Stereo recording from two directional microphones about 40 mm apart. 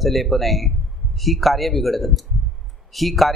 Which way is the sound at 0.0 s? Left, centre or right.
Centre.